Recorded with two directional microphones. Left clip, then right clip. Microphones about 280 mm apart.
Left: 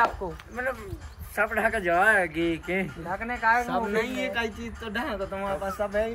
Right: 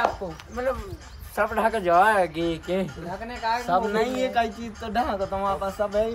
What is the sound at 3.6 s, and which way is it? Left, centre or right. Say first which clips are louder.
Speech: right 4 dB; right.